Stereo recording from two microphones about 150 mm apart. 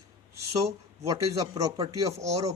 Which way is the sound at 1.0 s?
20° right (ahead or behind).